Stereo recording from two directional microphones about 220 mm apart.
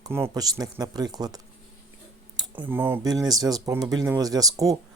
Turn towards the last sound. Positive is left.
turn(degrees=-15)  # may be behind; listen again after turning